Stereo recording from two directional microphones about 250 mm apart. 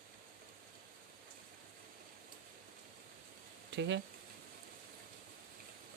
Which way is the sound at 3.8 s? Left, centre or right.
Right.